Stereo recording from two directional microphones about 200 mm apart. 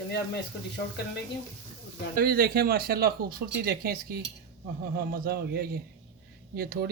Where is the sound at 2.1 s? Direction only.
50° right (ahead or behind).